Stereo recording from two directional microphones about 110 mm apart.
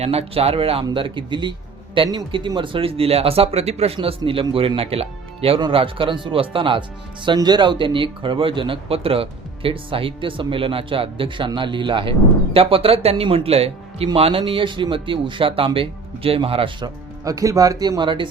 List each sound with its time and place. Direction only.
0.0 s speech: 65° right (ahead or behind); by 2.5 s 45° right (ahead or behind)
2.6 s speech: 55° right (ahead or behind)
5.5 s speech: 50° right (ahead or behind)
7.3 s speech: 40° right (ahead or behind)
16.8 s speech: 30° right (ahead or behind); by 18.3 s 50° right (ahead or behind)